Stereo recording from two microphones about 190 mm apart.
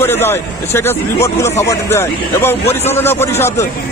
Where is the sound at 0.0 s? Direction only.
10° left (ahead or behind).